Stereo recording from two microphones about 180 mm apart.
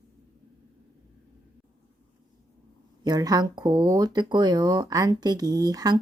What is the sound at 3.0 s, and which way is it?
Speech, 20° right (ahead or behind).